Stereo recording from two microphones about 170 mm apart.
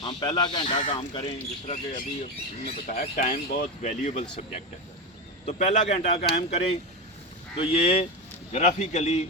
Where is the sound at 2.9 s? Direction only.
45° left (ahead or behind).